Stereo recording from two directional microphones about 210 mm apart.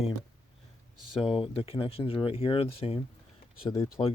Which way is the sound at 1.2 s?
25° left (ahead or behind).